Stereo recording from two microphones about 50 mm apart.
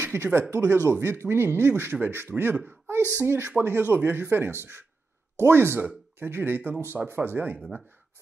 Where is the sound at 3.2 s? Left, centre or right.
Right.